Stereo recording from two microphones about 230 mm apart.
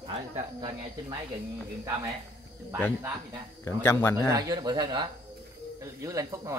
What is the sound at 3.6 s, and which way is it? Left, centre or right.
Speech, centre.